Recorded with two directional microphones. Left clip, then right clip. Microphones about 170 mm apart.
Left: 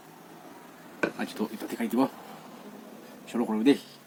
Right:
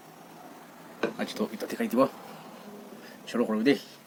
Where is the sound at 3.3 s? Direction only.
20° right (ahead or behind).